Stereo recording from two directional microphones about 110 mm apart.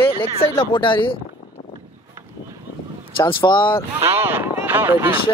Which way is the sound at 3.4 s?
30° left (ahead or behind).